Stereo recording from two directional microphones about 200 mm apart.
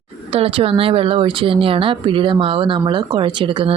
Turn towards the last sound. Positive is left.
turn(degrees=-25)  # may be behind; listen again after turning